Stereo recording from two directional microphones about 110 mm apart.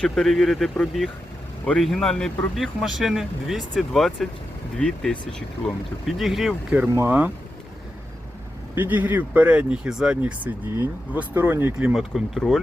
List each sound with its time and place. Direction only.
0.0 s speech: 5° left (ahead or behind)
6.7 s speech: 15° right (ahead or behind)
8.7 s speech: 15° right (ahead or behind)
11.9 s speech: 5° right (ahead or behind)